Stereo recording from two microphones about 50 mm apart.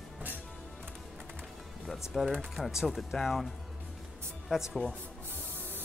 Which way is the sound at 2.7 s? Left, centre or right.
Centre.